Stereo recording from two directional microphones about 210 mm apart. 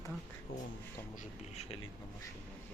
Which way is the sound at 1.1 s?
30° left (ahead or behind).